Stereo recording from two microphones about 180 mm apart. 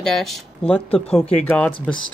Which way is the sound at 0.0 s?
Centre (ahead or behind).